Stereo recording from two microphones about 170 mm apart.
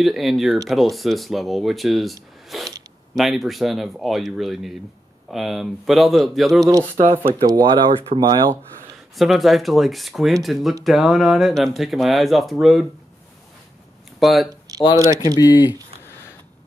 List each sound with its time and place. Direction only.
0.0 s speech: centre (ahead or behind)
2.5 s zipper: centre (ahead or behind)
3.2 s speech: centre (ahead or behind)
6.6 s speech: 20° right (ahead or behind)
9.1 s speech: centre (ahead or behind)
14.2 s speech: centre (ahead or behind)
15.4 s speech: 25° left (ahead or behind)